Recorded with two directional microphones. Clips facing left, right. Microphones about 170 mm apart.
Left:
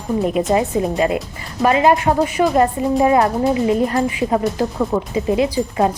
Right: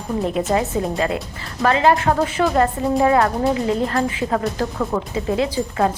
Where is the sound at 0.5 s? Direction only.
15° left (ahead or behind).